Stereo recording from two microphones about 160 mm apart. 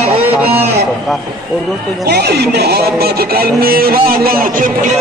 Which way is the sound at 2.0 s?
90° right.